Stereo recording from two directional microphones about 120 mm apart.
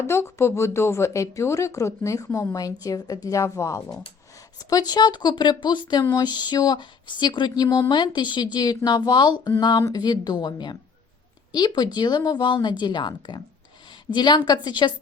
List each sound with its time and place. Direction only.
0.0 s speech: 20° left (ahead or behind); by 14.9 s 40° left (ahead or behind)